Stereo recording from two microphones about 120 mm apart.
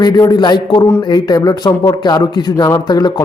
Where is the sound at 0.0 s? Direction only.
35° left (ahead or behind).